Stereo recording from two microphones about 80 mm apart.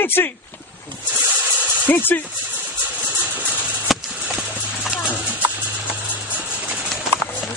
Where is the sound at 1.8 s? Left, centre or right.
Left.